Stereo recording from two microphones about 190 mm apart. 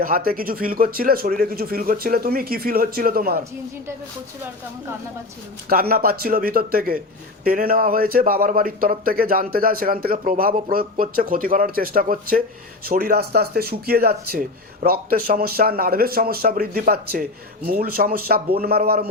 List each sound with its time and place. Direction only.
0.0 s speech: 50° right (ahead or behind)
5.6 s speech: 50° right (ahead or behind)